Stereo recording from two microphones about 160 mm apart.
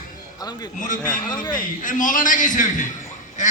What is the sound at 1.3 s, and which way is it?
Speech, 25° left (ahead or behind).